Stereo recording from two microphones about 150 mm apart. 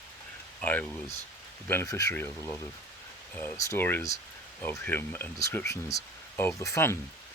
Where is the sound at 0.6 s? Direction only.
10° left (ahead or behind).